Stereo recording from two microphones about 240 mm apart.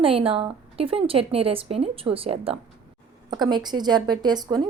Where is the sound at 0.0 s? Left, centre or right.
Right.